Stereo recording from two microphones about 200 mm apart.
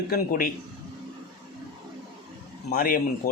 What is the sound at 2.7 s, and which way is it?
Speech, 45° left (ahead or behind).